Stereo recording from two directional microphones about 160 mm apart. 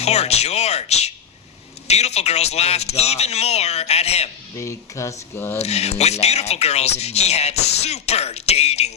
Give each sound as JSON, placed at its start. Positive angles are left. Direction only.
{"t": 0.0, "sound": "speech", "side_deg": 40}
{"t": 4.5, "sound": "speech", "side_deg": 20}
{"t": 5.5, "sound": "speech", "side_deg": 40}